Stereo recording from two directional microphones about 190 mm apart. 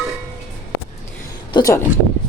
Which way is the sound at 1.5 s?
20° left (ahead or behind).